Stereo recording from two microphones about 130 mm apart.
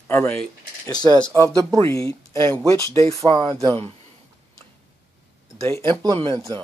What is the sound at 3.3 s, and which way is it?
Speech, 35° right (ahead or behind).